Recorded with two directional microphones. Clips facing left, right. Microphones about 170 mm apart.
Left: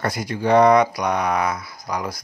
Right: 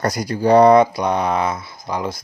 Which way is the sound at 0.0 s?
40° right (ahead or behind).